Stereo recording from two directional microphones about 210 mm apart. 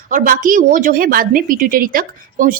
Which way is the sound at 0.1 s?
40° right (ahead or behind).